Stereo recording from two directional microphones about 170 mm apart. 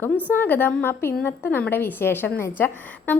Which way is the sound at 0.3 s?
10° left (ahead or behind).